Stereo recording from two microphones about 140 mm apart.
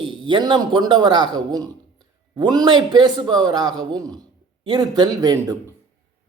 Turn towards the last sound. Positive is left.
turn(degrees=-25)  # may be behind; listen again after turning